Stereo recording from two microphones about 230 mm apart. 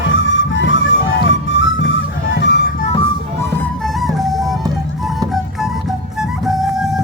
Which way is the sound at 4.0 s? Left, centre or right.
Centre.